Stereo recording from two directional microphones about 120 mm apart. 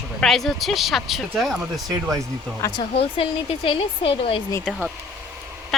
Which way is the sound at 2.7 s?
40° left (ahead or behind).